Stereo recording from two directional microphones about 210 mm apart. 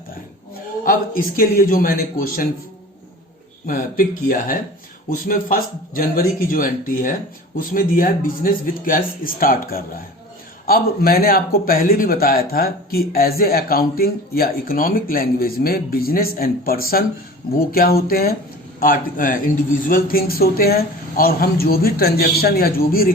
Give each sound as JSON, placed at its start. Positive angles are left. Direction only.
{"t": 0.9, "sound": "speech", "side_deg": 45}
{"t": 3.7, "sound": "a man's voice", "side_deg": 40}